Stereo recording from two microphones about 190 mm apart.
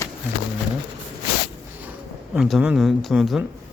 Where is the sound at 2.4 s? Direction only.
Centre (ahead or behind).